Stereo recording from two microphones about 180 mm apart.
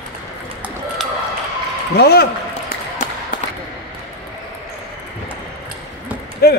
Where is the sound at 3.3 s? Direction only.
50° left (ahead or behind).